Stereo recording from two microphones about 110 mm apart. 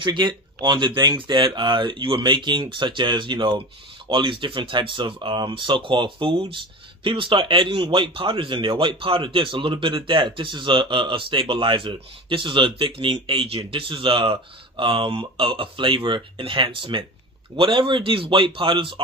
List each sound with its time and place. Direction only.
0.0 s speech: 45° right (ahead or behind)